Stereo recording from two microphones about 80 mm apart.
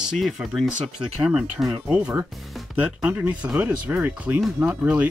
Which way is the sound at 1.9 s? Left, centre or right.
Centre.